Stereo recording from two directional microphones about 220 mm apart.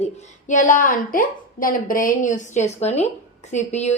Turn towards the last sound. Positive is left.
turn(degrees=30)  # may be behind; listen again after turning